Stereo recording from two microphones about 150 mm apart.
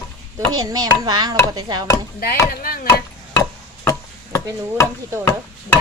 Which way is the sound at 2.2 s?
85° left.